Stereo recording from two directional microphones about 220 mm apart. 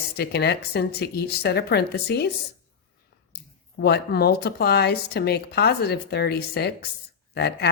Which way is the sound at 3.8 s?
45° left (ahead or behind).